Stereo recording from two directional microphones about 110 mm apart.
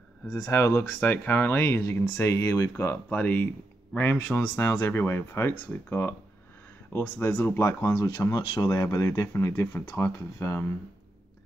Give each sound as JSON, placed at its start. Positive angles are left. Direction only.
{"t": 0.3, "sound": "speech", "side_deg": 25}